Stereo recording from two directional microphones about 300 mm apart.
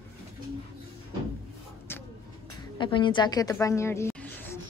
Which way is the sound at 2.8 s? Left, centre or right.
Centre.